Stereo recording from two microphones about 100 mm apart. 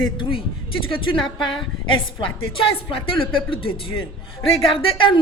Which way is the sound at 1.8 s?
55° left (ahead or behind).